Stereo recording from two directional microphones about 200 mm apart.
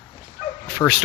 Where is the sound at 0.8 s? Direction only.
10° left (ahead or behind).